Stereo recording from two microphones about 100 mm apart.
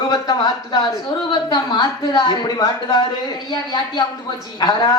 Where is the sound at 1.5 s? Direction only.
45° left (ahead or behind).